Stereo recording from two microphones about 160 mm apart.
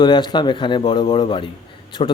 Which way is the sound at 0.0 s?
25° left (ahead or behind).